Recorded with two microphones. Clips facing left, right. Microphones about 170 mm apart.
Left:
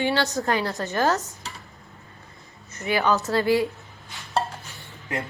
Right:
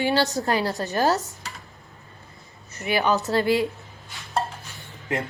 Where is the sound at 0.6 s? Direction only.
20° right (ahead or behind).